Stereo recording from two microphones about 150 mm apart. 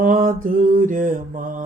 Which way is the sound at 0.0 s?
65° right (ahead or behind).